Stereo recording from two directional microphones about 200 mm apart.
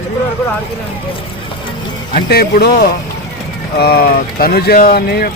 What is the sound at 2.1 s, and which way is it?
Speech, 50° left (ahead or behind).